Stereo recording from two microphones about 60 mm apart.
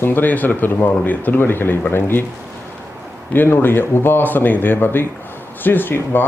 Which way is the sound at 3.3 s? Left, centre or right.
Left.